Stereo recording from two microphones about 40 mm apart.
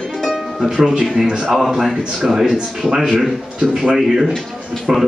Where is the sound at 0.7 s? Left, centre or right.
Centre.